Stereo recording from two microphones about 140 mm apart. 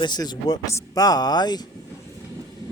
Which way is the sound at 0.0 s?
30° left (ahead or behind).